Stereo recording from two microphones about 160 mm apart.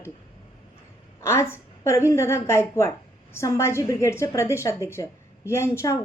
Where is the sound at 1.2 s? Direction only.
15° left (ahead or behind).